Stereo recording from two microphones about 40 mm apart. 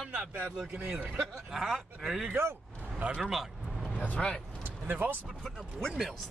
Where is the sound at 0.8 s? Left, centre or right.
Right.